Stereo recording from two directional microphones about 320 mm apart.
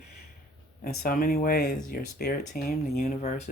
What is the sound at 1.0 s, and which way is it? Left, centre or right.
Speech, left.